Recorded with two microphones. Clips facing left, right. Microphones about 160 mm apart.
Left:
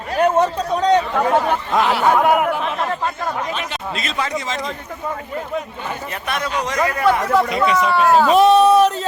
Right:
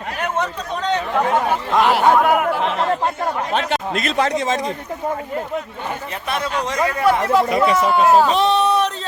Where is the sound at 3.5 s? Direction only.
65° right (ahead or behind).